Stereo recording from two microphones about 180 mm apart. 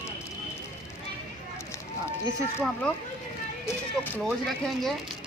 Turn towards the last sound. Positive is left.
turn(degrees=0)  # may be behind; listen again after turning